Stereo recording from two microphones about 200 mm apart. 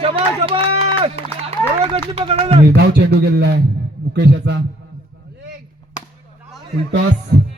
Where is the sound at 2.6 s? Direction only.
55° right (ahead or behind).